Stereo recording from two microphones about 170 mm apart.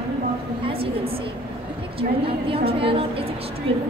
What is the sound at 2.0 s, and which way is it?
A woman's voice, 35° right (ahead or behind).